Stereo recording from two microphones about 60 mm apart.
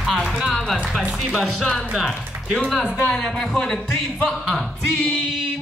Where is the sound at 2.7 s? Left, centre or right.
Centre.